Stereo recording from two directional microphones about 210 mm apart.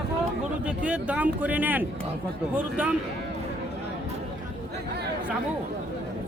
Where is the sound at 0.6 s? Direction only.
5° right (ahead or behind).